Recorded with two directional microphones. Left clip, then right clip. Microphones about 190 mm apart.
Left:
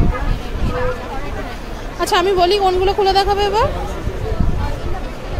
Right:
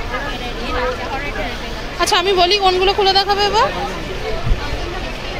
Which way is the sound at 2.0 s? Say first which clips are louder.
Even; 20° left (ahead or behind).